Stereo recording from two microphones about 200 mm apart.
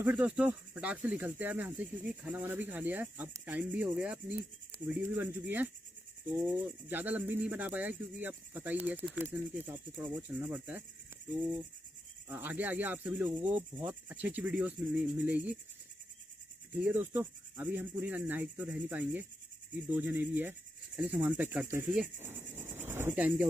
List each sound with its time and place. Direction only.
0.0 s speech: 10° right (ahead or behind)
12.3 s speech: 10° right (ahead or behind)
16.7 s speech: 10° right (ahead or behind)
19.7 s cricket: 10° right (ahead or behind)